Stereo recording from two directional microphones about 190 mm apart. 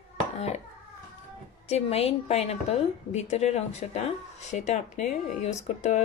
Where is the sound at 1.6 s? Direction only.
30° left (ahead or behind).